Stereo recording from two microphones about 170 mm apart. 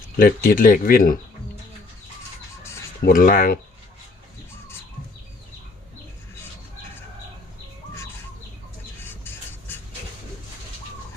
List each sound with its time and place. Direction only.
0.2 s speech: 55° left (ahead or behind)
3.0 s speech: 55° left (ahead or behind)